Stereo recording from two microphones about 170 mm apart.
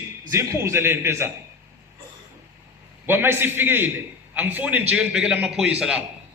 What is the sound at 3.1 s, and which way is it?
A man's voice, 10° right (ahead or behind).